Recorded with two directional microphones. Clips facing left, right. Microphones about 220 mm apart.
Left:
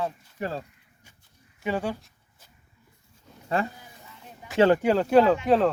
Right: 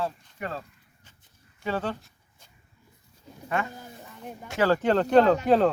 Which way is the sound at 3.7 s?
50° right (ahead or behind).